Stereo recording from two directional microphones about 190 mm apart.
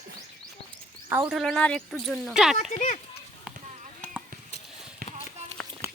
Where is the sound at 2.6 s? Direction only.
35° left (ahead or behind).